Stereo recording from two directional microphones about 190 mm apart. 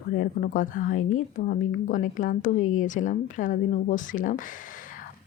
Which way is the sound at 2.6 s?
90° left.